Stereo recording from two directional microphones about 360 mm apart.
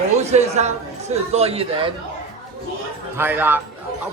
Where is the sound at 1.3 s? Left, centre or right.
Centre.